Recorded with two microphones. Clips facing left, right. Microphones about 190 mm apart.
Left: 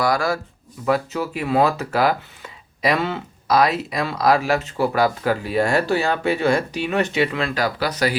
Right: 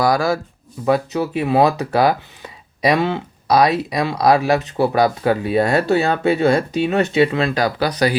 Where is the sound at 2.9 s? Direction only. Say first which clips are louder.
Right 5 dB; 15° right (ahead or behind).